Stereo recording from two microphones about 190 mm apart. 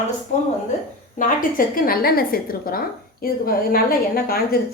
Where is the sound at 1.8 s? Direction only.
50° left (ahead or behind).